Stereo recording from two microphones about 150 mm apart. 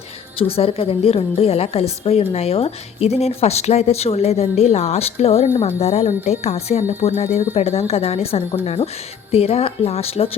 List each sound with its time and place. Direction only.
0.3 s a woman's voice: 40° left (ahead or behind)